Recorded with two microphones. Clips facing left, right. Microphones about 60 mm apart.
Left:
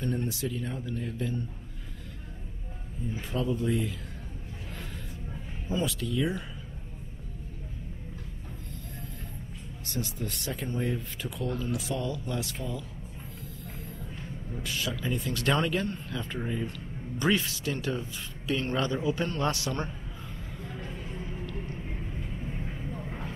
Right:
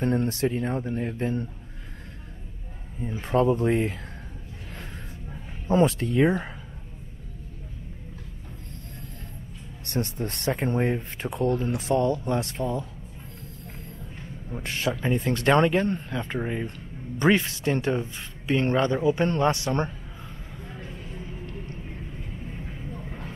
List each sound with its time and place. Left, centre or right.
0.0 s speech: right
3.0 s speech: right
5.9 s speech: right
9.8 s speech: right
14.5 s a man's voice: right
20.6 s a sound: centre
21.0 s vehicle: centre